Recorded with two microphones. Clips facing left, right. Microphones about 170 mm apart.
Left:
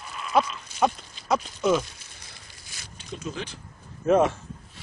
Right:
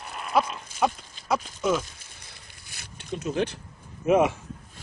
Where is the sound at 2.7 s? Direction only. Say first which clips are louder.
Right 5 dB; 60° right (ahead or behind).